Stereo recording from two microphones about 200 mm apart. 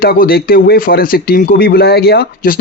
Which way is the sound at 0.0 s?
50° left (ahead or behind).